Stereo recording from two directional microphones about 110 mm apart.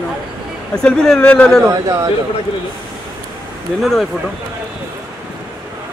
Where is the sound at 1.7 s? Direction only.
30° right (ahead or behind).